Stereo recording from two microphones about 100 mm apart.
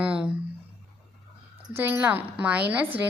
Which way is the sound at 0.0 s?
10° right (ahead or behind).